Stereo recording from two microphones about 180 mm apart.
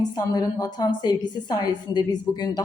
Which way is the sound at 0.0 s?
20° left (ahead or behind).